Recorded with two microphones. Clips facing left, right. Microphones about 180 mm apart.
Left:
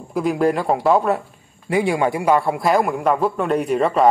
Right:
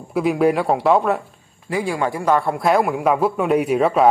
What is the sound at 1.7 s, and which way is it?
Speech, 20° left (ahead or behind).